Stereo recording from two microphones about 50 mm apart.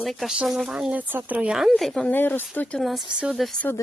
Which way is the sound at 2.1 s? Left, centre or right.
Left.